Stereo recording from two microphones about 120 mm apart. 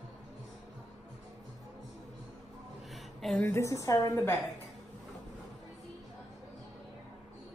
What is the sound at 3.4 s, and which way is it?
Speech, 25° left (ahead or behind).